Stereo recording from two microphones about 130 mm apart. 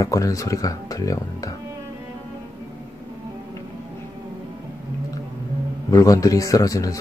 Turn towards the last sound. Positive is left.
turn(degrees=25)  # may be behind; listen again after turning